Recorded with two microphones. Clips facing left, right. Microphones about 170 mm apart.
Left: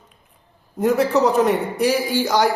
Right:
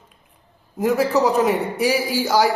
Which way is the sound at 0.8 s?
Centre (ahead or behind).